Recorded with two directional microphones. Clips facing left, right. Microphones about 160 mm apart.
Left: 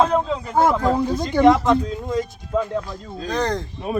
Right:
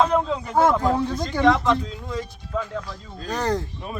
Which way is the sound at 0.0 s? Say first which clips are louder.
Left 2 dB; centre (ahead or behind).